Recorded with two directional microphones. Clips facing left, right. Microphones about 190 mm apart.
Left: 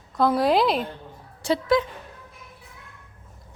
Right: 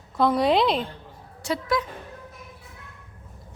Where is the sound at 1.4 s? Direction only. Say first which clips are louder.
Left 5 dB; 30° left (ahead or behind).